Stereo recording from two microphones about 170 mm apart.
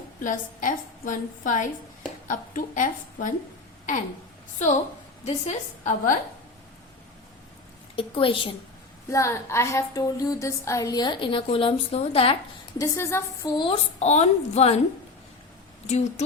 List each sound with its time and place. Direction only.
0.2 s a woman's voice: 50° left (ahead or behind)
5.2 s a woman's voice: 45° left (ahead or behind)
7.9 s a woman's voice: 30° left (ahead or behind)
9.0 s a woman's voice: 15° left (ahead or behind); by 12.4 s 35° left (ahead or behind)
12.8 s a woman's voice: 15° left (ahead or behind)
13.6 s a woman's voice: 35° left (ahead or behind)
15.9 s a woman's voice: 40° left (ahead or behind)